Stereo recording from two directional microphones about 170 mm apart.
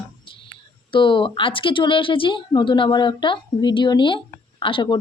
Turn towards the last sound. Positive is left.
turn(degrees=30)  # may be behind; listen again after turning